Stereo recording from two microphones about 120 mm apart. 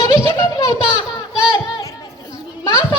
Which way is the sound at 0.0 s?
35° left (ahead or behind).